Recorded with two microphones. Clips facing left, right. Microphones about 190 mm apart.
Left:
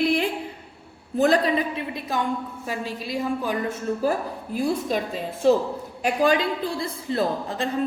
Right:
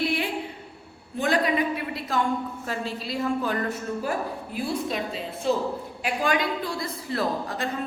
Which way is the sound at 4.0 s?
40° left (ahead or behind).